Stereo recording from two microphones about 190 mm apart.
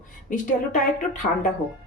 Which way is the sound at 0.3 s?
40° left (ahead or behind).